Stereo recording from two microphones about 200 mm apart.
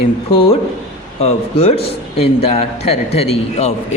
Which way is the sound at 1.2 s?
30° left (ahead or behind).